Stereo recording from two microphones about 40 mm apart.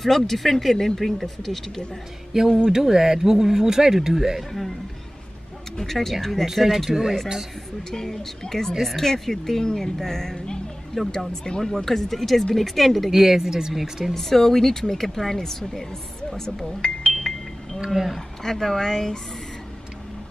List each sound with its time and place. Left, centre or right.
0.0 s speech: centre
2.3 s speech: centre
5.8 s speech: centre
6.4 s speech: centre
7.9 s speech: centre
11.6 s speech: centre
13.1 s speech: centre
14.1 s speech: centre
17.1 s music: centre
17.7 s speech: centre
18.4 s speech: centre